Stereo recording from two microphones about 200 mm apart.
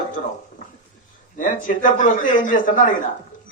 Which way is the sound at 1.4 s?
40° left (ahead or behind).